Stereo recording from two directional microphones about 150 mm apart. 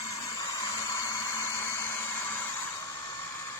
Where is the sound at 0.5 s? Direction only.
25° left (ahead or behind).